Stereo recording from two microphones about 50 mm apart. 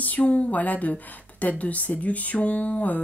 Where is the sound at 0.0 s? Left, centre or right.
Left.